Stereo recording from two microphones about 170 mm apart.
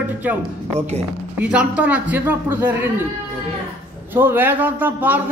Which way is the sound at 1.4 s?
10° right (ahead or behind).